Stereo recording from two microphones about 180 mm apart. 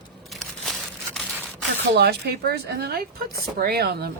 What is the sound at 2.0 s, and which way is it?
Speech, 60° right (ahead or behind).